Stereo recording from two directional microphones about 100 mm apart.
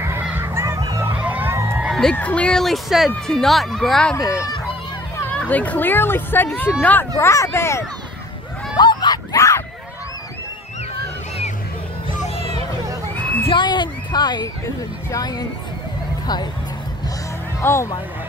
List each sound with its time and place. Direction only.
0.4 s honk: 25° right (ahead or behind)
0.7 s vehicle: 40° right (ahead or behind)
1.0 s emergency vehicle: 15° right (ahead or behind)
1.5 s a sound: 25° right (ahead or behind)
1.9 s a sound: 5° left (ahead or behind)
2.1 s speech: 15° left (ahead or behind)
4.2 s speech: 5° right (ahead or behind)
5.3 s speech: 15° left (ahead or behind)
7.2 s speech: 30° left (ahead or behind)
8.7 s a sound: 45° left (ahead or behind)
13.5 s speech: 50° left (ahead or behind)
17.6 s speech: 30° left (ahead or behind)